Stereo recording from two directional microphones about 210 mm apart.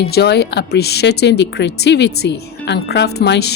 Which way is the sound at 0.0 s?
50° left (ahead or behind).